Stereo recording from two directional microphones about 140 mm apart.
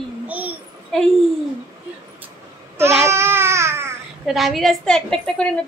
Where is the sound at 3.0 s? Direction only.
20° right (ahead or behind).